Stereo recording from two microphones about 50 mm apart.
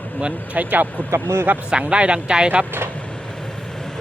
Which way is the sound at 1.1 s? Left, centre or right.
Right.